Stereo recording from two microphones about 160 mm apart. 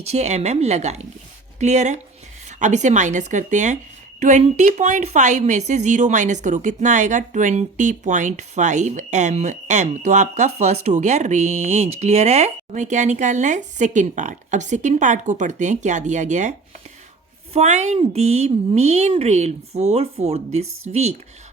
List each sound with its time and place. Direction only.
0.0 s a woman's voice: 40° right (ahead or behind)